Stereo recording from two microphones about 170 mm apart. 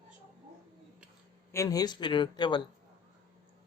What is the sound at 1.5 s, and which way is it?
Speech, 20° left (ahead or behind).